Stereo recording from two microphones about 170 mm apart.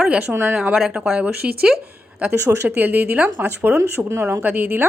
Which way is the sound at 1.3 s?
65° right (ahead or behind).